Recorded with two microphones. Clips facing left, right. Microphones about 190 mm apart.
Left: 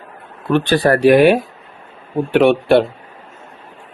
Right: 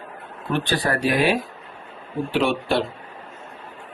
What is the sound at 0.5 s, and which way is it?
Speech, 70° left (ahead or behind).